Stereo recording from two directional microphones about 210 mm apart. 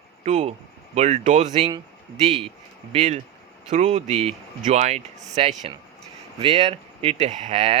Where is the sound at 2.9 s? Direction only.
35° right (ahead or behind).